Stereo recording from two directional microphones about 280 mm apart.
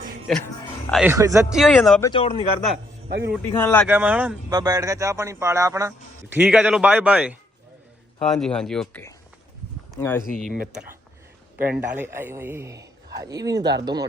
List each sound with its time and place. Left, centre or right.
0.3 s speech: centre
2.0 s speech: centre
3.1 s a man's voice: right
3.3 s speech: centre
3.8 s speech: centre
11.5 s a man's voice: centre